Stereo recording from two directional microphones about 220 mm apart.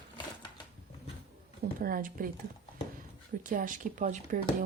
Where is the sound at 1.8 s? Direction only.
40° right (ahead or behind).